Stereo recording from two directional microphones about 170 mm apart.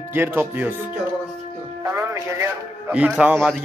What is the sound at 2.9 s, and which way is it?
Speech, 5° right (ahead or behind).